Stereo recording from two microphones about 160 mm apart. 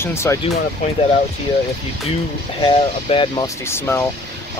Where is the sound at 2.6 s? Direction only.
30° left (ahead or behind).